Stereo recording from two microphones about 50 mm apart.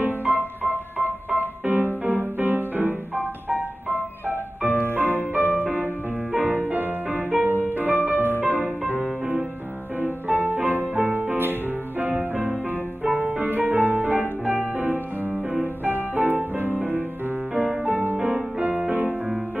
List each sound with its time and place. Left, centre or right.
0.0 s music: right
10.0 s music: right
12.1 s music: right
15.6 s music: right
17.8 s music: right
18.1 s music: centre
18.6 s music: right